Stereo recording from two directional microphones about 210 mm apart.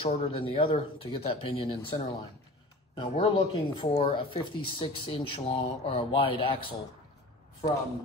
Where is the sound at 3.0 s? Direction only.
30° left (ahead or behind).